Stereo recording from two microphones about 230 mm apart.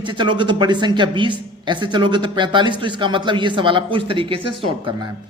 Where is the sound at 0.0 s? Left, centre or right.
Right.